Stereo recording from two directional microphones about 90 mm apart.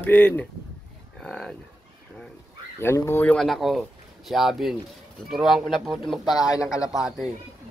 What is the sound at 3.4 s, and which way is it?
Speech, centre (ahead or behind).